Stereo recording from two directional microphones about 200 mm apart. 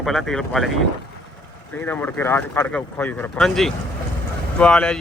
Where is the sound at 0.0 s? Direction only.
Centre (ahead or behind).